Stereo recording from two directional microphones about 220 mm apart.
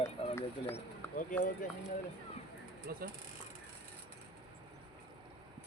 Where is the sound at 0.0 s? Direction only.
10° left (ahead or behind).